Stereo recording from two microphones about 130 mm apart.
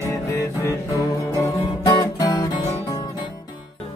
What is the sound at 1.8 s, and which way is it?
Music, 30° left (ahead or behind).